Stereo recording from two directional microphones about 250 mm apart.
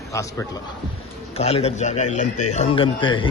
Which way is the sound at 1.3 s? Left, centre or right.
Left.